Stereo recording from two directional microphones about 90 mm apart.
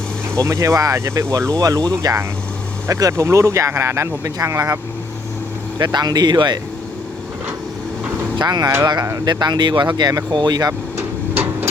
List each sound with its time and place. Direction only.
0.3 s speech: 35° right (ahead or behind)
5.8 s speech: 50° right (ahead or behind)
8.4 s speech: 50° right (ahead or behind)